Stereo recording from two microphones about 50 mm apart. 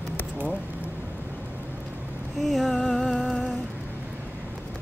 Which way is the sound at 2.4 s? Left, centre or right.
Centre.